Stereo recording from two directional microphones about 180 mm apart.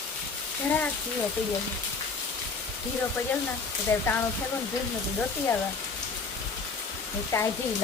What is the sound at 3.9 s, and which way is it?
Speech, 15° left (ahead or behind).